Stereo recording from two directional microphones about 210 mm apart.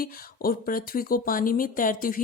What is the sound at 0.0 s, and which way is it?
A woman's voice, 45° left (ahead or behind).